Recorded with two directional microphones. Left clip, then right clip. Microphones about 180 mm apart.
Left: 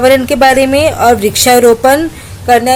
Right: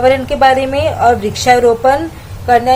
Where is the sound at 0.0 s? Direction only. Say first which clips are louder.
Left 3 dB; 40° left (ahead or behind).